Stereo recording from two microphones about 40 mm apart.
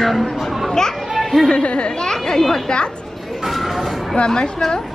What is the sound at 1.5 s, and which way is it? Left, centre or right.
Speech, left.